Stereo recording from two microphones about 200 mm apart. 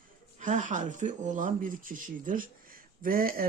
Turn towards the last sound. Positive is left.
turn(degrees=-45)  # may be behind; listen again after turning